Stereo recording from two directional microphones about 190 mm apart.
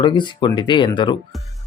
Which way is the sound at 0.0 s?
25° left (ahead or behind).